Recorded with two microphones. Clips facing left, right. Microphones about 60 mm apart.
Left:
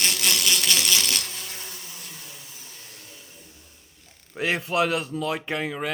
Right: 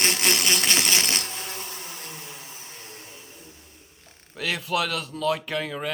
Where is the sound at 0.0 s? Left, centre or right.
Right.